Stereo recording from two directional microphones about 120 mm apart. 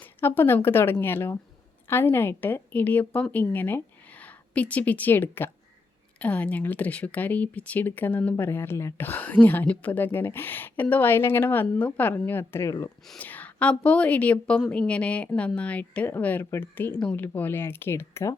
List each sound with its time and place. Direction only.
0.0 s a woman's voice: 15° left (ahead or behind)